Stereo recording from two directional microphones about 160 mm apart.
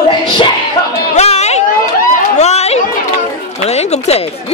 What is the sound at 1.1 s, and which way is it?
Chatter, 45° left (ahead or behind).